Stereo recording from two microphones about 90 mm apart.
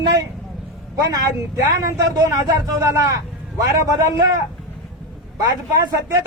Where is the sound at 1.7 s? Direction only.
40° right (ahead or behind).